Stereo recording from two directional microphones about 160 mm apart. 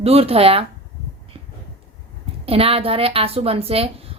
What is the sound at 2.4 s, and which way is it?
A woman's voice, 35° right (ahead or behind).